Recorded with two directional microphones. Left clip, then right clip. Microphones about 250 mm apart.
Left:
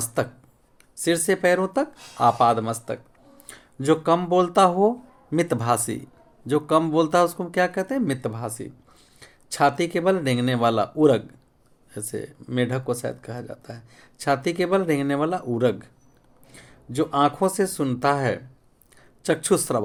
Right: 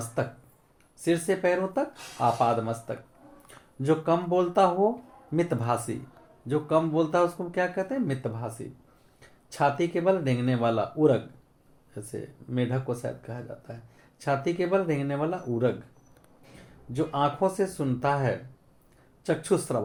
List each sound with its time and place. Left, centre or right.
0.0 s a sound: left
0.9 s speech: left
16.9 s speech: left